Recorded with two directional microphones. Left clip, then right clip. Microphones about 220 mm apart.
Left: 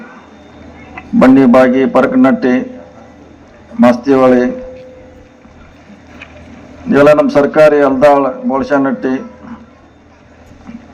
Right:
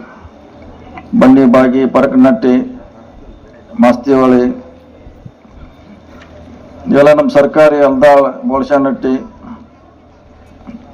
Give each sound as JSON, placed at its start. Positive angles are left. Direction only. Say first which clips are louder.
{"t": 0.9, "sound": "a man's voice", "louder": "even", "side_deg": -45}
{"t": 3.8, "sound": "a man's voice", "louder": "even", "side_deg": -40}
{"t": 6.8, "sound": "a man's voice", "louder": "even", "side_deg": -40}